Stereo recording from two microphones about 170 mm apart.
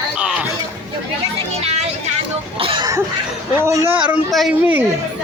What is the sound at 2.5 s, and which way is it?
Cough, 30° right (ahead or behind).